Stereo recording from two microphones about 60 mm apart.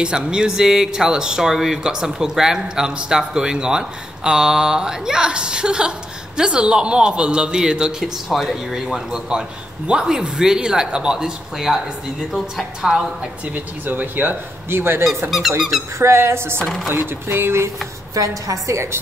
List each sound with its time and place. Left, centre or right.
0.0 s speech: centre
13.5 s speech: right
14.7 s a sound: right
16.0 s speech: right
16.9 s a sound: right
18.1 s a woman's voice: right